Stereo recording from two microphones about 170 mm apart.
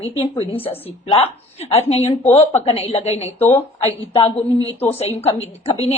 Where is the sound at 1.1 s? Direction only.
35° left (ahead or behind).